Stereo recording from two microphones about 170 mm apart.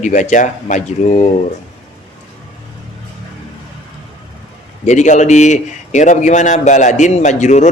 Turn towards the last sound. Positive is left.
turn(degrees=45)  # may be behind; listen again after turning